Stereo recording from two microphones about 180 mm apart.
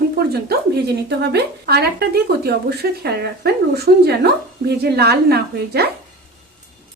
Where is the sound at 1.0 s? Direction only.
65° right (ahead or behind).